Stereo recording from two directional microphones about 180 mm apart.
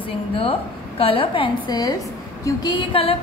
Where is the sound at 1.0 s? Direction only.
30° left (ahead or behind).